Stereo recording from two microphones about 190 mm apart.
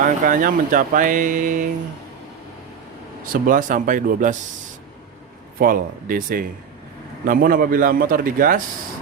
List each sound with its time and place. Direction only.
0.0 s speech: 45° right (ahead or behind)
3.2 s speech: 45° right (ahead or behind)
5.5 s speech: 45° right (ahead or behind)